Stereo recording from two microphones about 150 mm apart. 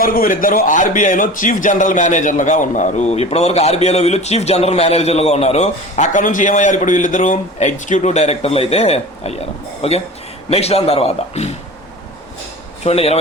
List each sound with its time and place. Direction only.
0.0 s a man's voice: 70° left (ahead or behind); by 11.5 s 45° left (ahead or behind)
12.8 s a man's voice: 45° left (ahead or behind)